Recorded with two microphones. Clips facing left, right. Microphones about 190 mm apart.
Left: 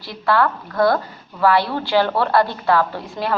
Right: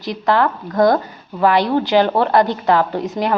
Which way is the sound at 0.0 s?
20° right (ahead or behind).